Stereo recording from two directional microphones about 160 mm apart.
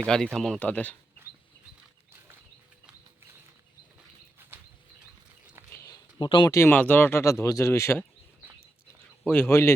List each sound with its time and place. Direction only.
0.0 s speech: 5° left (ahead or behind)
6.1 s speech: 30° left (ahead or behind)
6.5 s speech: 15° left (ahead or behind)
9.2 s speech: 15° left (ahead or behind)